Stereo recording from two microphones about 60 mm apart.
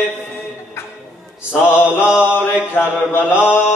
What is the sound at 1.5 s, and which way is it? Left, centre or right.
Mantra, left.